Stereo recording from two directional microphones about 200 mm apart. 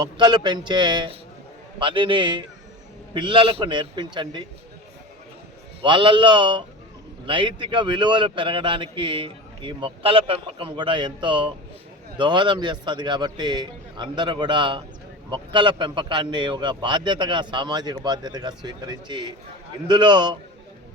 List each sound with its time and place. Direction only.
0.0 s speech: 20° right (ahead or behind)
5.8 s speech: 25° right (ahead or behind)